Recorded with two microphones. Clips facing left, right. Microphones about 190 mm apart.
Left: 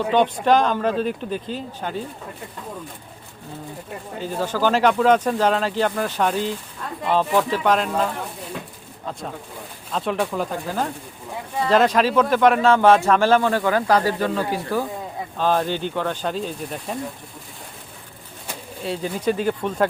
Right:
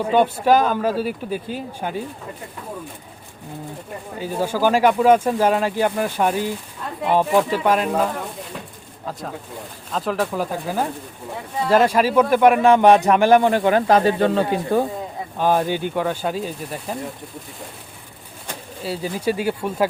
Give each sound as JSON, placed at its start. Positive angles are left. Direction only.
{"t": 0.0, "sound": "speech", "side_deg": -10}
{"t": 4.2, "sound": "speech", "side_deg": -10}
{"t": 9.9, "sound": "speech", "side_deg": 0}
{"t": 15.4, "sound": "speech", "side_deg": -15}
{"t": 18.8, "sound": "speech", "side_deg": -5}